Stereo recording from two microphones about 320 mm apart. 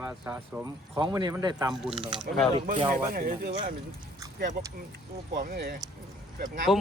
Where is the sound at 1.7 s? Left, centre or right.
Centre.